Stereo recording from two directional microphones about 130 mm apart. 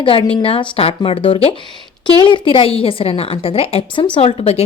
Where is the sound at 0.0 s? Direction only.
40° left (ahead or behind).